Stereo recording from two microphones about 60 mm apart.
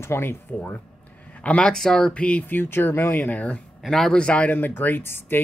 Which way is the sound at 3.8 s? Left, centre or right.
Centre.